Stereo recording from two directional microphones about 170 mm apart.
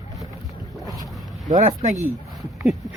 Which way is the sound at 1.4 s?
45° right (ahead or behind).